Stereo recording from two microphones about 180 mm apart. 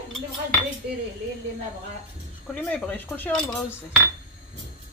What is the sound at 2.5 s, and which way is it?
Speech, 5° left (ahead or behind).